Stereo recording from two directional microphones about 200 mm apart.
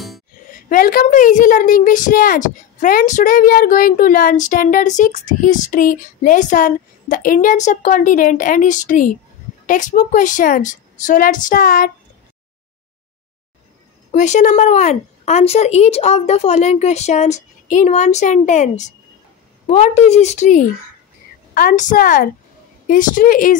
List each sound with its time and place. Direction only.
0.5 s a woman's voice: 45° left (ahead or behind)
14.1 s a woman's voice: 35° left (ahead or behind)